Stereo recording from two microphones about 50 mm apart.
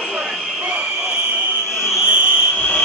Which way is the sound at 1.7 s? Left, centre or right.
Left.